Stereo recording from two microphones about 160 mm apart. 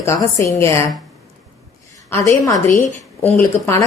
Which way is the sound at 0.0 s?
20° left (ahead or behind).